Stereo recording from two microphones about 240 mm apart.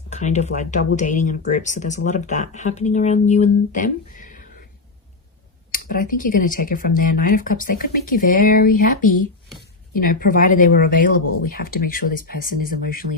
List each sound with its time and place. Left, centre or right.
0.1 s speech: left
5.7 s speech: left